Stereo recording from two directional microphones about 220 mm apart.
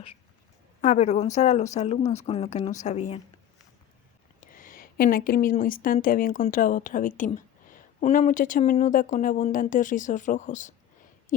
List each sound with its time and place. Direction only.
0.8 s a woman's voice: 35° left (ahead or behind)
4.4 s a woman's voice: 40° left (ahead or behind)